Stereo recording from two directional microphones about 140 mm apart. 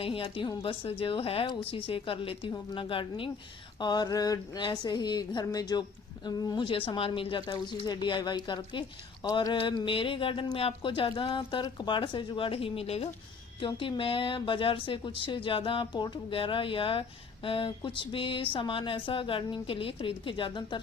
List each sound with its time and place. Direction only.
0.0 s speech: 40° left (ahead or behind)